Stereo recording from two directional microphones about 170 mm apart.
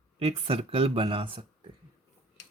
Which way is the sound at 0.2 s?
35° right (ahead or behind).